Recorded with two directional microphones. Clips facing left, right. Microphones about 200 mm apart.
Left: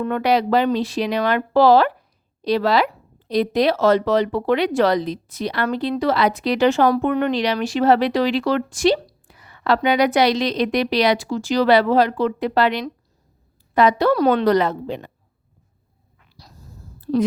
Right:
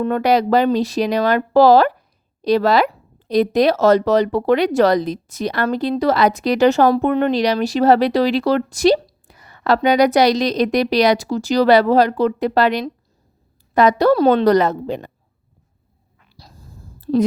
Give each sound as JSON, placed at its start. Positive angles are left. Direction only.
{"t": 0.0, "sound": "a woman's voice", "side_deg": -40}
{"t": 16.4, "sound": "dog", "side_deg": -30}
{"t": 17.1, "sound": "a woman's voice", "side_deg": -30}